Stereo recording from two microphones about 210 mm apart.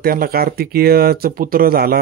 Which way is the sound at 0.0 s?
45° right (ahead or behind).